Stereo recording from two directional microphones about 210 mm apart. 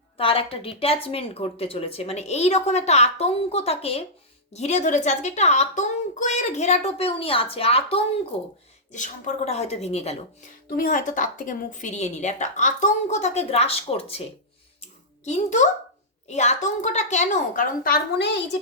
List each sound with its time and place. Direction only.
0.2 s a woman's voice: 25° left (ahead or behind); by 18.3 s 45° left (ahead or behind)